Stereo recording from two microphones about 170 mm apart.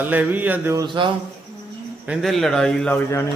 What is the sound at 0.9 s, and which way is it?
Speech, 30° right (ahead or behind).